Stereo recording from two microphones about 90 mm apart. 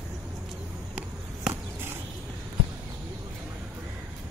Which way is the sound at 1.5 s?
25° right (ahead or behind).